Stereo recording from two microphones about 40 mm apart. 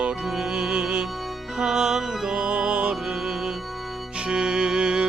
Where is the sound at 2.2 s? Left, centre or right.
Right.